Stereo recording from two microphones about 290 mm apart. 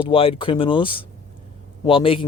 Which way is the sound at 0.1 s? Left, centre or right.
Centre.